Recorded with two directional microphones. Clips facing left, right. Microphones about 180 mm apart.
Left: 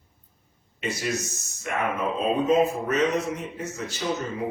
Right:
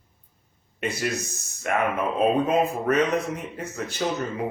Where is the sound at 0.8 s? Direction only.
60° right (ahead or behind).